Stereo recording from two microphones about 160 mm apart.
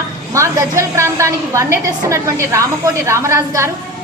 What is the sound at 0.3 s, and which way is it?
A woman's voice, 20° right (ahead or behind).